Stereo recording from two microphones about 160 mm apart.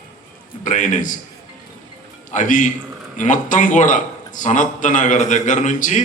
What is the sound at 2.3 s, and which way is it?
A man's voice, 50° left (ahead or behind).